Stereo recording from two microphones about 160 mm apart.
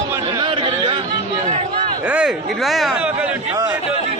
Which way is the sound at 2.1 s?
5° right (ahead or behind).